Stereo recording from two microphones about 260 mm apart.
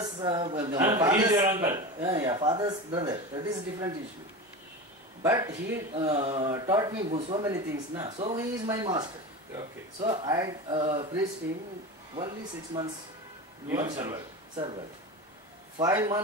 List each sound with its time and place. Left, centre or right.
0.0 s a man's voice: centre
5.2 s a man's voice: centre
12.7 s a man's voice: centre
15.8 s a man's voice: centre